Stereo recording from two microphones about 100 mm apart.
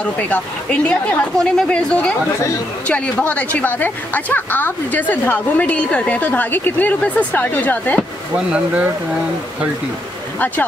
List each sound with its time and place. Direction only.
0.0 s a woman's voice: 15° left (ahead or behind)
8.5 s speech: 10° right (ahead or behind)